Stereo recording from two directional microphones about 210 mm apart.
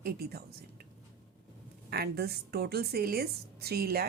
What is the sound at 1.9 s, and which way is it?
Speech, 50° right (ahead or behind).